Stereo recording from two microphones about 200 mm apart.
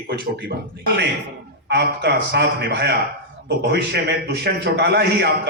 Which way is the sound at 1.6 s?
55° right (ahead or behind).